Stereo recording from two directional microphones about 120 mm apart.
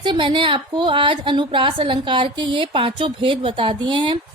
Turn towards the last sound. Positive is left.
turn(degrees=-45)  # may be behind; listen again after turning